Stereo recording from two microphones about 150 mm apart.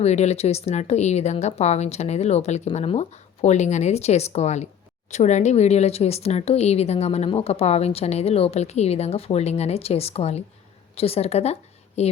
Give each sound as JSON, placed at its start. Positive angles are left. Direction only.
{"t": 0.0, "sound": "a woman's voice", "side_deg": 45}